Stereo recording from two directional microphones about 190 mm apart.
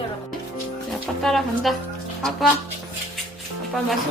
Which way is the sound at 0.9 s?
Centre (ahead or behind).